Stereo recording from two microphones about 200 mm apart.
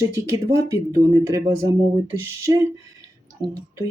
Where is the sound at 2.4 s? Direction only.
15° right (ahead or behind).